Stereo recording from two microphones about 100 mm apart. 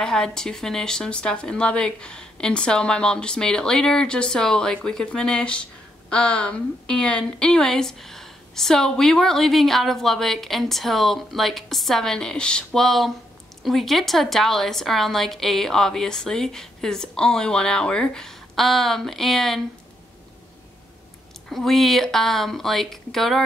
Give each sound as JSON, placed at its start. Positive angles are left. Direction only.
{"t": 0.0, "sound": "a woman's voice", "side_deg": 5}
{"t": 21.5, "sound": "a woman's voice", "side_deg": 0}